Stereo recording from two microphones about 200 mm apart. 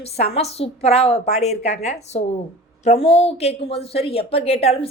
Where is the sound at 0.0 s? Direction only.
30° left (ahead or behind).